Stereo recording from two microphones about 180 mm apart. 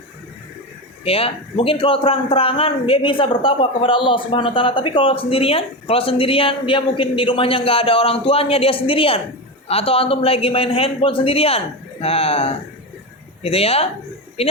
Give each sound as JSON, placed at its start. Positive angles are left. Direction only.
{"t": 1.0, "sound": "a man's voice", "side_deg": 30}